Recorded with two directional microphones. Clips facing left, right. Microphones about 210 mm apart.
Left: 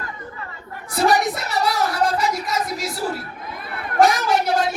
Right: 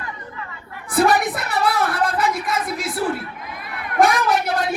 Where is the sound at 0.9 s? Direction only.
55° right (ahead or behind).